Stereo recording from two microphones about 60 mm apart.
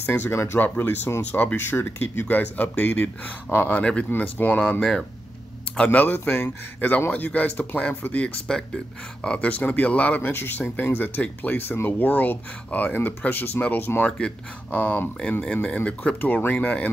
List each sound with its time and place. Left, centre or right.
0.0 s speech: left
0.3 s speech: left
0.6 s speech: left
1.6 s speech: left
4.1 s speech: left
5.9 s speech: left
7.1 s speech: left
8.5 s speech: centre; by 14.0 s left
14.0 s speech: centre